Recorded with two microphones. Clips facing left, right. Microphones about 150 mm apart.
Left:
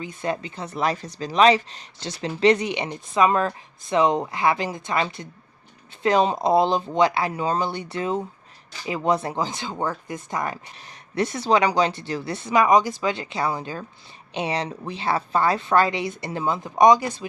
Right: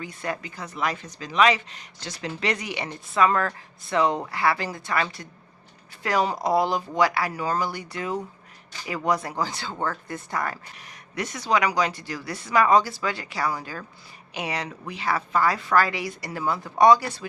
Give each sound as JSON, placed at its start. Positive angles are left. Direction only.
{"t": 0.0, "sound": "speech", "side_deg": 25}
{"t": 11.1, "sound": "speech", "side_deg": 30}